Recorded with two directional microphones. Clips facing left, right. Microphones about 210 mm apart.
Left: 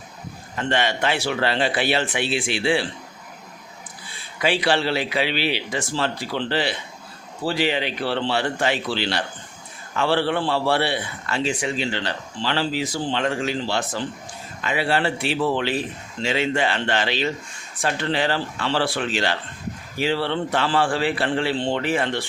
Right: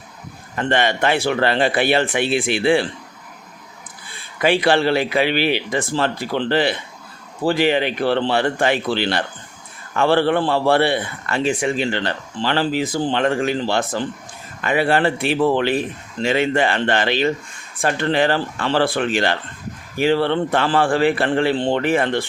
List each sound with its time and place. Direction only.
0.5 s a man's voice: 55° right (ahead or behind)
4.4 s a man's voice: 50° right (ahead or behind)